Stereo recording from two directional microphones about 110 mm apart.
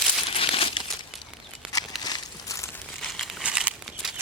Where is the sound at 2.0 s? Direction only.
35° left (ahead or behind).